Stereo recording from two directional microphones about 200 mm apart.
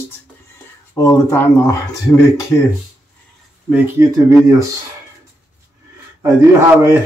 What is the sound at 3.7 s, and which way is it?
Speech, 15° right (ahead or behind).